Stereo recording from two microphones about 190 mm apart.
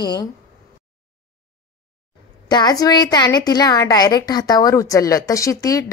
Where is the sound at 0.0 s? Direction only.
20° left (ahead or behind).